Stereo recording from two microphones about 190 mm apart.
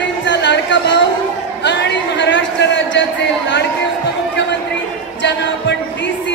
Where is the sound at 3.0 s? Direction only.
70° left (ahead or behind).